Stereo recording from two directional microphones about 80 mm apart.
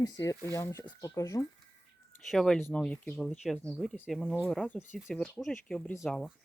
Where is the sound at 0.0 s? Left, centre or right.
Left.